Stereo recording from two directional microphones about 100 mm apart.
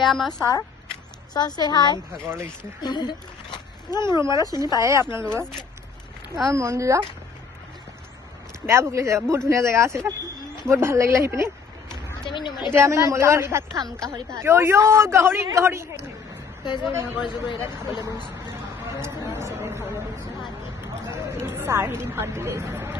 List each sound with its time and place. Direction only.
0.0 s speech: centre (ahead or behind)
1.3 s speech: 40° left (ahead or behind)
4.8 s speech: 30° right (ahead or behind)
6.5 s speech: 30° right (ahead or behind)
8.6 s speech: 30° right (ahead or behind)
12.2 s speech: 50° left (ahead or behind)
12.7 s speech: 30° right (ahead or behind)
16.6 s speech: 50° left (ahead or behind)
19.0 s a sound: 25° right (ahead or behind)
21.3 s speech: 25° right (ahead or behind)